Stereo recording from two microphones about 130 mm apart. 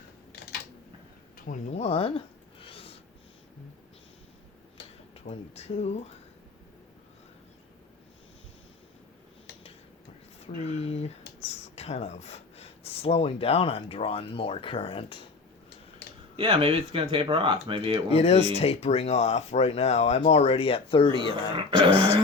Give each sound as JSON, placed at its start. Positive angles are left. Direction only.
{"t": 1.5, "sound": "a sound", "side_deg": 55}
{"t": 5.1, "sound": "speech", "side_deg": 55}
{"t": 10.4, "sound": "speech", "side_deg": 55}
{"t": 16.4, "sound": "speech", "side_deg": -45}
{"t": 18.1, "sound": "speech", "side_deg": 50}
{"t": 21.1, "sound": "speech", "side_deg": -40}